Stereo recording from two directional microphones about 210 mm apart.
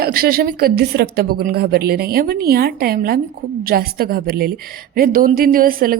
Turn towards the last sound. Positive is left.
turn(degrees=-45)  # may be behind; listen again after turning